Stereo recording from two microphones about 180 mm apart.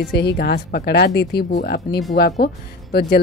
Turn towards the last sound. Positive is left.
turn(degrees=60)  # may be behind; listen again after turning